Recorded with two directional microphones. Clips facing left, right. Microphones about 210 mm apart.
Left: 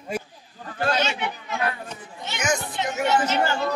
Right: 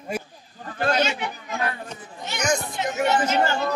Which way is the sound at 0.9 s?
35° right (ahead or behind).